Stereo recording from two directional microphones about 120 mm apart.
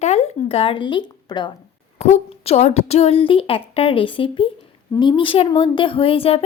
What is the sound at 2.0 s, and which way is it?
A woman's voice, 60° left (ahead or behind).